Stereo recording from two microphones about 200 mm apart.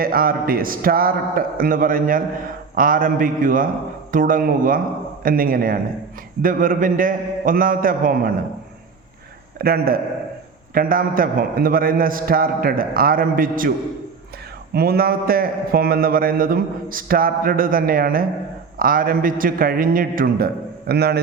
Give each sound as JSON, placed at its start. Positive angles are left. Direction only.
{"t": 0.0, "sound": "a man's voice", "side_deg": -45}
{"t": 9.6, "sound": "a man's voice", "side_deg": -50}
{"t": 14.7, "sound": "a man's voice", "side_deg": -50}